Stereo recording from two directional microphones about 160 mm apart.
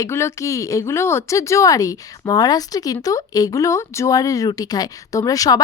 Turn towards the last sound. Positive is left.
turn(degrees=25)  # may be behind; listen again after turning